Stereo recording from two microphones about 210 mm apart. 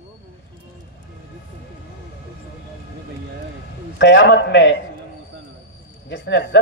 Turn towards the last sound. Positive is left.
turn(degrees=55)  # may be behind; listen again after turning